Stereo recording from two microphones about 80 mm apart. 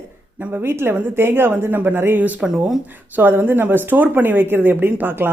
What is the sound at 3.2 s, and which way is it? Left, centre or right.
Speech, right.